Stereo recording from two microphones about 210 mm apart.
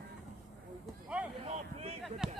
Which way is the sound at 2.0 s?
Centre (ahead or behind).